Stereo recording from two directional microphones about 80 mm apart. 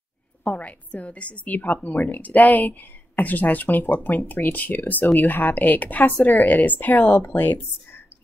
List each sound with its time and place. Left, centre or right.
0.4 s a woman's voice: centre